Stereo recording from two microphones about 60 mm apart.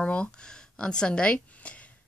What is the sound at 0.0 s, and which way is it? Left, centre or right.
A woman's voice, centre.